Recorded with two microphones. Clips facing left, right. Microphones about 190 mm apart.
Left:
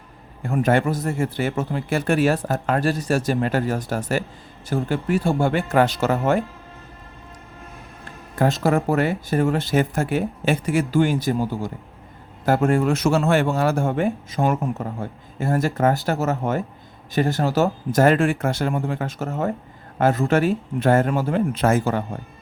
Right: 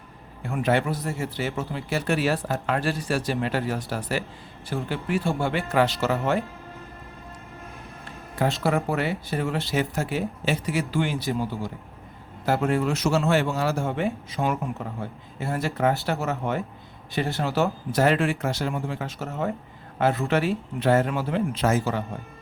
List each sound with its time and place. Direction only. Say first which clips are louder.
0.4 s speech: left 4 dB; 45° left (ahead or behind)
8.4 s speech: left 4 dB; 45° left (ahead or behind)